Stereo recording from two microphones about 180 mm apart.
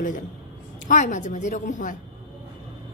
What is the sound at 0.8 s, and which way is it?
A woman's voice, 45° left (ahead or behind).